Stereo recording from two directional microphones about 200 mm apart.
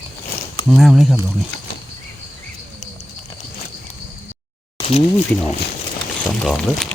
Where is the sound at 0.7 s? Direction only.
Centre (ahead or behind).